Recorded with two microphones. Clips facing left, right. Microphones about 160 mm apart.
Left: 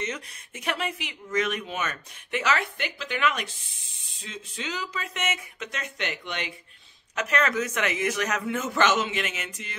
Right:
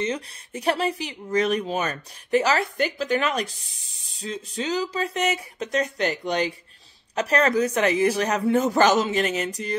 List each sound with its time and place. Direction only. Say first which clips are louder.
0.0 s speech: right 6 dB; 35° right (ahead or behind)